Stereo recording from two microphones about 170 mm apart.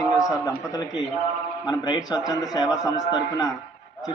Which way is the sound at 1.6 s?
25° left (ahead or behind).